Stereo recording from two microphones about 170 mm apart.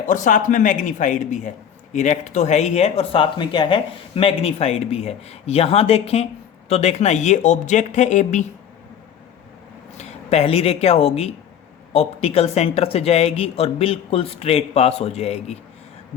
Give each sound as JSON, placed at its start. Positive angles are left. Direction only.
{"t": 0.1, "sound": "a man's voice", "side_deg": 50}
{"t": 10.0, "sound": "a man's voice", "side_deg": 40}